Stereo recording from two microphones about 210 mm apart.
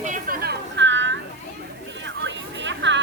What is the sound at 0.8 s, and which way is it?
Children playing, 60° right (ahead or behind).